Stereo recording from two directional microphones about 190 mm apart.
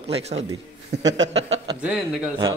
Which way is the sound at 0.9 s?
70° right (ahead or behind).